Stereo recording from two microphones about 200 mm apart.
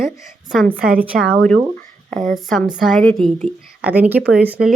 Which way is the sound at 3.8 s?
10° right (ahead or behind).